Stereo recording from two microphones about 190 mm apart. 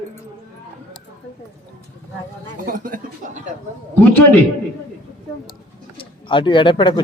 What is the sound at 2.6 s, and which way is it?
Speech, 45° right (ahead or behind).